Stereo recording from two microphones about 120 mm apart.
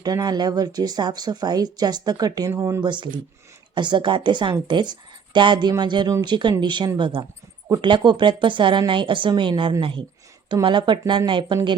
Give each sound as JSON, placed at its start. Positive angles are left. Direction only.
{"t": 0.0, "sound": "speech", "side_deg": -35}
{"t": 2.9, "sound": "a woman's voice", "side_deg": -40}